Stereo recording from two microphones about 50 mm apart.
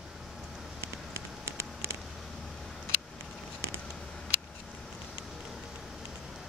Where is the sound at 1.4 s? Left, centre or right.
Right.